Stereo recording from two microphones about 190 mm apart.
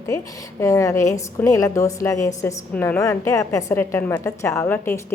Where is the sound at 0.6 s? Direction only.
15° left (ahead or behind).